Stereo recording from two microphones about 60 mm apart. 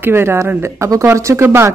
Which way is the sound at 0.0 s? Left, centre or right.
Right.